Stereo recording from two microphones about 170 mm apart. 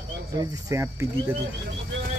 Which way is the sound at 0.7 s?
15° right (ahead or behind).